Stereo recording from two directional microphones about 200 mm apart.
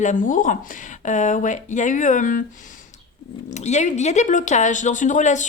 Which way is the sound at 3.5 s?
35° left (ahead or behind).